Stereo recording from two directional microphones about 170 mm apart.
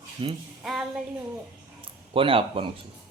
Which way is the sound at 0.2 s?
30° right (ahead or behind).